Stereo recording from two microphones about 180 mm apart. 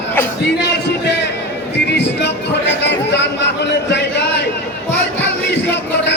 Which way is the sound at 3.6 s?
75° left (ahead or behind).